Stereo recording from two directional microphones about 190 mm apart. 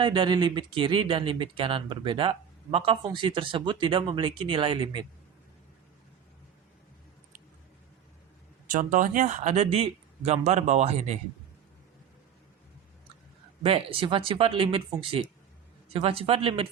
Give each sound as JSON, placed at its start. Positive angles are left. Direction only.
{"t": 0.0, "sound": "speech", "side_deg": -25}
{"t": 8.6, "sound": "speech", "side_deg": -45}
{"t": 13.6, "sound": "speech", "side_deg": -30}